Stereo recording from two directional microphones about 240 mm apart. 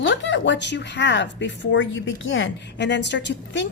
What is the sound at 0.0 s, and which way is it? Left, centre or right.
A woman's voice, left.